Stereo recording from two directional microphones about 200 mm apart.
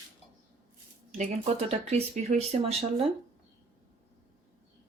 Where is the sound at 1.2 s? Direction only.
30° right (ahead or behind).